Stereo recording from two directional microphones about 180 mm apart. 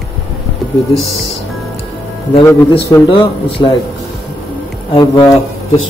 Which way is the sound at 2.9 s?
20° left (ahead or behind).